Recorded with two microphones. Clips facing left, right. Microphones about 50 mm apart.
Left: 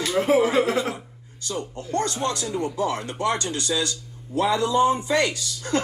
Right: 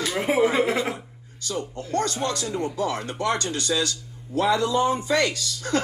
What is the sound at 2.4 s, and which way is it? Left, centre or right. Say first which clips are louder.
Speech: left 1 dB; centre.